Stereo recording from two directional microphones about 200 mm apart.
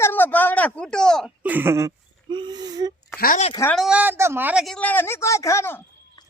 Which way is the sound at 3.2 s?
45° left (ahead or behind).